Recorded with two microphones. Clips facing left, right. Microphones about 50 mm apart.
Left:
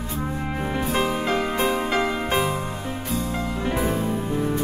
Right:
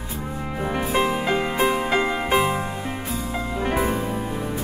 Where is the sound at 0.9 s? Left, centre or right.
Centre.